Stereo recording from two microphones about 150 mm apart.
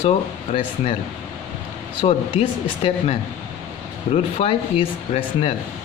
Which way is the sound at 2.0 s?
40° left (ahead or behind).